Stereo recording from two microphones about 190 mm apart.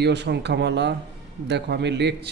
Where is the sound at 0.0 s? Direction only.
65° right (ahead or behind).